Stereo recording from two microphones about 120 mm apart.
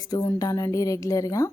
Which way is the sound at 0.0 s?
30° left (ahead or behind).